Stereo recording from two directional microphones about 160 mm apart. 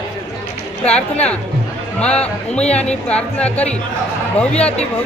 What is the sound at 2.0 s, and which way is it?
A woman's voice, 5° left (ahead or behind).